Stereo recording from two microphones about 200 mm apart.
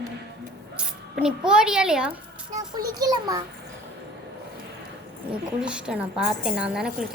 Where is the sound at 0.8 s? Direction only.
5° right (ahead or behind).